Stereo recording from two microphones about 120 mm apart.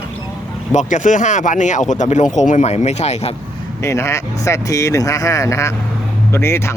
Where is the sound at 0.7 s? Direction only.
85° left; by 3.3 s 65° left (ahead or behind).